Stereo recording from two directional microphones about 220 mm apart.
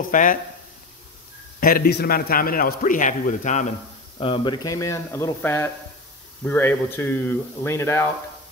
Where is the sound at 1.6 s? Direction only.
40° left (ahead or behind).